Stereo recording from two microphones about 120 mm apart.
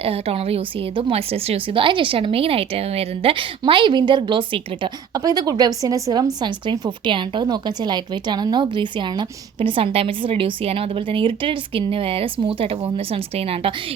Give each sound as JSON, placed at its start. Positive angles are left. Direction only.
{"t": 0.0, "sound": "a woman's voice", "side_deg": -55}
{"t": 3.6, "sound": "a woman's voice", "side_deg": -40}